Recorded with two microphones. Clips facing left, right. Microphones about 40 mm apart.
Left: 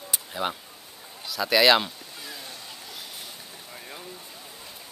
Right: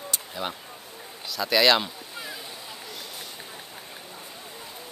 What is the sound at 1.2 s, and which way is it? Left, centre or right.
Speech, centre.